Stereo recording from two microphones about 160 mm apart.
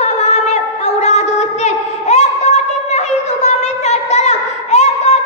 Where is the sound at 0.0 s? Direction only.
45° left (ahead or behind).